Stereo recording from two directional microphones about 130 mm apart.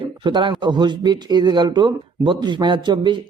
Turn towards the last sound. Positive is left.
turn(degrees=-35)  # may be behind; listen again after turning